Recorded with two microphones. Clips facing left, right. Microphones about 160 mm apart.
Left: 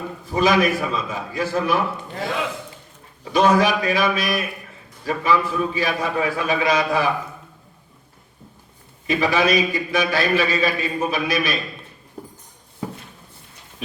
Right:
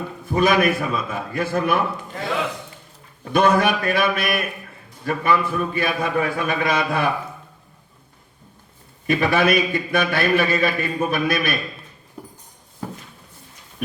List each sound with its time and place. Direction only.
0.3 s a man's voice: 55° right (ahead or behind)
3.3 s a man's voice: 55° right (ahead or behind)
9.0 s a man's voice: 55° right (ahead or behind)